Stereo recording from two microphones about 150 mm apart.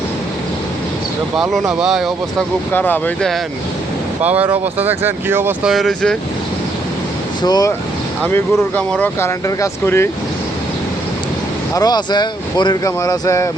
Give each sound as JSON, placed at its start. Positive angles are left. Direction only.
{"t": 1.4, "sound": "speech", "side_deg": -5}
{"t": 2.7, "sound": "speech", "side_deg": 10}
{"t": 4.2, "sound": "speech", "side_deg": -10}
{"t": 5.7, "sound": "speech", "side_deg": 5}
{"t": 7.4, "sound": "speech", "side_deg": 25}
{"t": 8.2, "sound": "speech", "side_deg": 10}
{"t": 11.7, "sound": "speech", "side_deg": 25}